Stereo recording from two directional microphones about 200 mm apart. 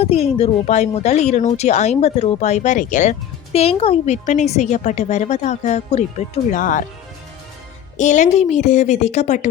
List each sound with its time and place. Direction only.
0.0 s speech: 30° left (ahead or behind)
7.9 s speech: 35° left (ahead or behind)